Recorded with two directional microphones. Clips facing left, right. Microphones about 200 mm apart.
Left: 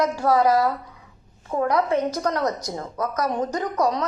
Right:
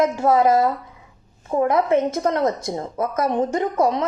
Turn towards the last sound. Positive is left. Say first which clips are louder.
# right 3 dB
turn(degrees=-25)  # may be behind; listen again after turning